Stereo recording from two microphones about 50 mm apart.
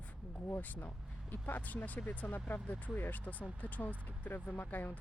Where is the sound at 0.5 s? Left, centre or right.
Left.